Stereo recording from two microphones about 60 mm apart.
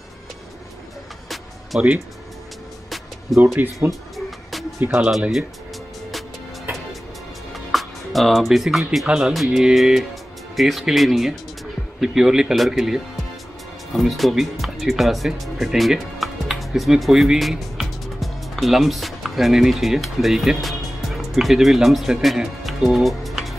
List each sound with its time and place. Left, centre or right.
1.7 s speech: centre
3.5 s speech: right
4.9 s speech: centre
7.5 s music: centre
9.0 s speech: centre
9.3 s speech: centre